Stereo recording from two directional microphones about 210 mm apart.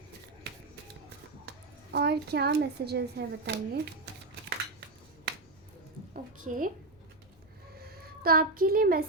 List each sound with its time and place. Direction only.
1.9 s a child's voice: 50° right (ahead or behind)
6.5 s speech: 35° right (ahead or behind)
7.8 s speech: 45° right (ahead or behind)